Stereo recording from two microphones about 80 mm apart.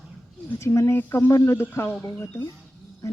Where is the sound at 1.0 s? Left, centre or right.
Left.